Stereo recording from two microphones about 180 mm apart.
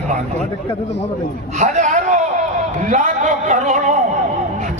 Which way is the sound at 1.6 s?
45° right (ahead or behind).